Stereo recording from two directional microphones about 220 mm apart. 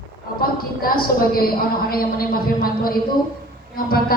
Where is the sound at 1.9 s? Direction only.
40° left (ahead or behind).